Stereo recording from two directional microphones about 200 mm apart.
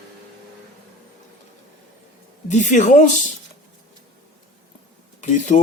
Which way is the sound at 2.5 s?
35° left (ahead or behind).